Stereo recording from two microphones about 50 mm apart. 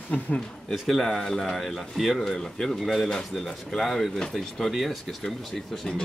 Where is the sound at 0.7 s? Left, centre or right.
Centre.